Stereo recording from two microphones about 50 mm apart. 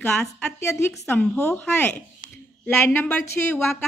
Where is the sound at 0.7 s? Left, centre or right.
Left.